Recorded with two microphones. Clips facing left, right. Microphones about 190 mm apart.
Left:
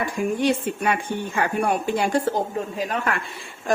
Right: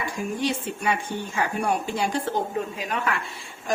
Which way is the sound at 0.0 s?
55° left (ahead or behind).